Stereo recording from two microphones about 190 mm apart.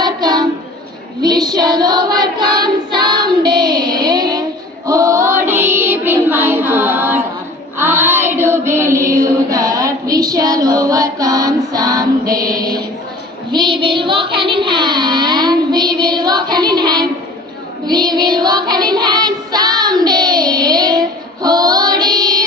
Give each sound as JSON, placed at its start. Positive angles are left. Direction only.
{"t": 0.0, "sound": "a sound", "side_deg": -20}
{"t": 1.2, "sound": "child singing", "side_deg": -20}
{"t": 21.4, "sound": "music", "side_deg": -20}